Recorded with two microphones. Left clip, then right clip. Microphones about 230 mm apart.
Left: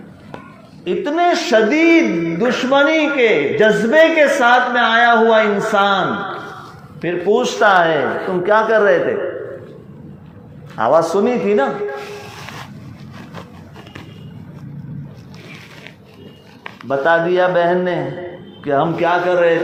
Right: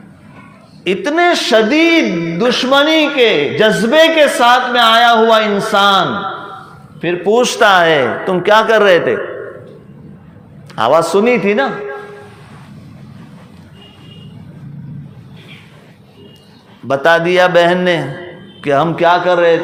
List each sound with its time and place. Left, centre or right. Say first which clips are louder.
0.9 s a man's voice: right 3 dB; right
7.0 s a man's voice: right 4 dB; right
10.8 s a man's voice: right 3 dB; right
16.9 s a man's voice: right 4 dB; right